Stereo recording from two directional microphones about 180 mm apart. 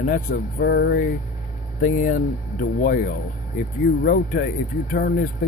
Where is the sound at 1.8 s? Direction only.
50° left (ahead or behind).